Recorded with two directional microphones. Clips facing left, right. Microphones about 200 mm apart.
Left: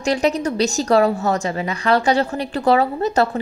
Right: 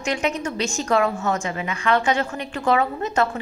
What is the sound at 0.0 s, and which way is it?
A woman's voice, 35° left (ahead or behind).